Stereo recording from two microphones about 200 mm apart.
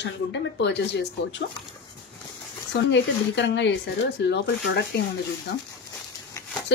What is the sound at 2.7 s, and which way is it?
Speech, 60° left (ahead or behind).